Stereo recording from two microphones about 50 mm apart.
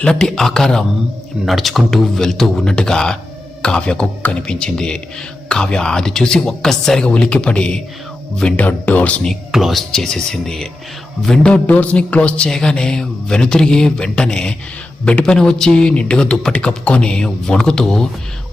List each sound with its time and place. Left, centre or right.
0.0 s speech: centre
1.5 s speech: centre
7.1 s speech: left
8.5 s speech: left
9.5 s speech: centre
9.9 s speech: centre
11.6 s speech: left; by 18.1 s centre